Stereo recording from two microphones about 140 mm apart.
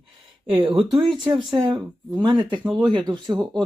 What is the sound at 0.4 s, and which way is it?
Speech, 40° right (ahead or behind).